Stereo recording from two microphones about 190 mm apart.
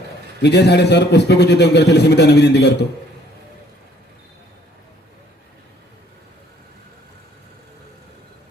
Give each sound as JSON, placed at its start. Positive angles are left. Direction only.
{"t": 0.4, "sound": "a man's voice", "side_deg": 60}